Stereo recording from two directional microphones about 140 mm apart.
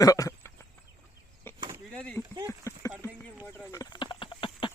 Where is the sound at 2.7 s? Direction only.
20° left (ahead or behind).